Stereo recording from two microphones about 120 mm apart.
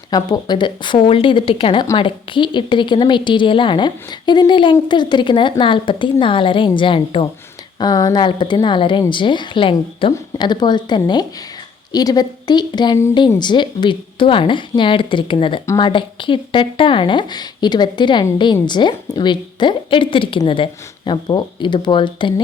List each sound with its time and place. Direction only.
0.1 s a woman's voice: 35° left (ahead or behind)
7.8 s a woman's voice: 35° left (ahead or behind)